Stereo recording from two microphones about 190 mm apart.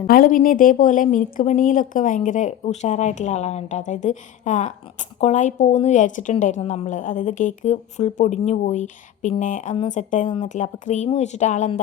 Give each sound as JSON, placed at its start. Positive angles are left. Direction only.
{"t": 0.1, "sound": "speech", "side_deg": 45}